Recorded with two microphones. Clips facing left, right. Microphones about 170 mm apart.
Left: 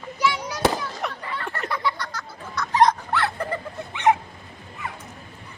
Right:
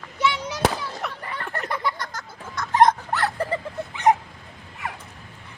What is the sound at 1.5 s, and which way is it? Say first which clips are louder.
Dog: even; 45° right (ahead or behind).